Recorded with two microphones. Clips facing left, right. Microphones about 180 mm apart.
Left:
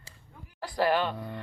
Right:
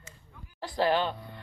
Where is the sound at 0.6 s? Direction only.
20° right (ahead or behind).